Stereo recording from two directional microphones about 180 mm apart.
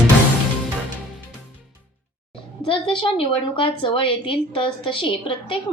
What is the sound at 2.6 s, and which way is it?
A woman's voice, 30° left (ahead or behind).